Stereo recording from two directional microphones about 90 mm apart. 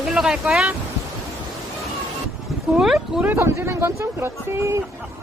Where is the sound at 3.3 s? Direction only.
30° right (ahead or behind).